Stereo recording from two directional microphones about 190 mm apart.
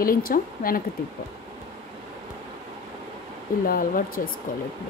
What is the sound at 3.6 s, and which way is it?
Speech, 50° left (ahead or behind).